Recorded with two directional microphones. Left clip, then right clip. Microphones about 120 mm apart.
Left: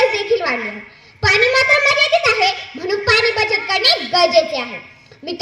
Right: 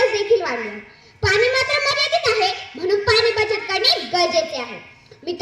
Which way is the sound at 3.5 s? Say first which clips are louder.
Left 3 dB; 50° left (ahead or behind).